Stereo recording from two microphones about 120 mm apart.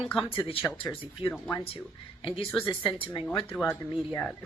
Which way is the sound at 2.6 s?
45° left (ahead or behind).